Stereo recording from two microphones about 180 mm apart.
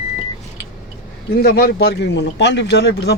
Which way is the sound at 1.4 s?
60° left (ahead or behind).